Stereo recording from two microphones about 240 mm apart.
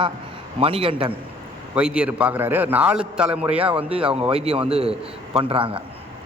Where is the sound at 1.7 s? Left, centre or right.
Centre.